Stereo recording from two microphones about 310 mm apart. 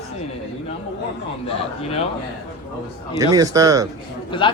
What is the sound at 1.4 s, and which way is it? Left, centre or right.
Speech, centre.